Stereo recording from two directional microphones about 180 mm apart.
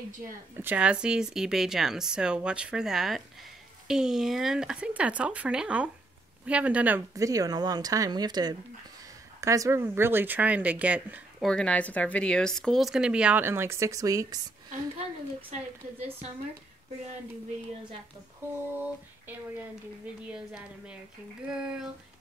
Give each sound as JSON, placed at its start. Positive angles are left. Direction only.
{"t": 0.6, "sound": "speech", "side_deg": -10}
{"t": 7.2, "sound": "speech", "side_deg": -20}
{"t": 11.4, "sound": "speech", "side_deg": 5}
{"t": 18.5, "sound": "speech", "side_deg": -10}